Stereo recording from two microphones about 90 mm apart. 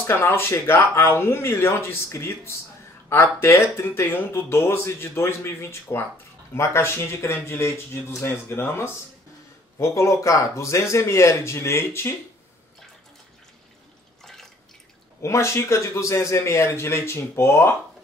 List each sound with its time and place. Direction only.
0.0 s a man's voice: 25° left (ahead or behind)
14.2 s drip: 5° left (ahead or behind)
15.2 s a man's voice: 30° left (ahead or behind)